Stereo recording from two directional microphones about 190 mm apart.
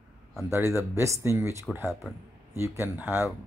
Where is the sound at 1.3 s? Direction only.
15° right (ahead or behind).